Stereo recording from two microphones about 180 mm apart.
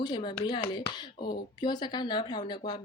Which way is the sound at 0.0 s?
25° left (ahead or behind).